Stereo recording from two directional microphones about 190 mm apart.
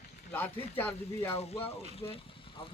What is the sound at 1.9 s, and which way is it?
Speech, 30° left (ahead or behind).